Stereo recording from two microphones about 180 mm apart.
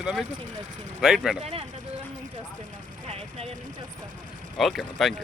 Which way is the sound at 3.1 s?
35° right (ahead or behind).